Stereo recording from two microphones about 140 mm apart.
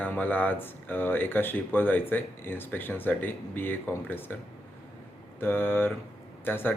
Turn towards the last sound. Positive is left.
turn(degrees=15)  # may be behind; listen again after turning